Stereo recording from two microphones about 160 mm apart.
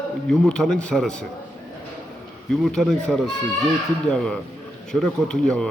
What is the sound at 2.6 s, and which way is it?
Speech, centre (ahead or behind).